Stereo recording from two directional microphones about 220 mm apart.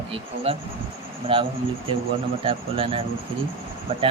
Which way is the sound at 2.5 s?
25° right (ahead or behind).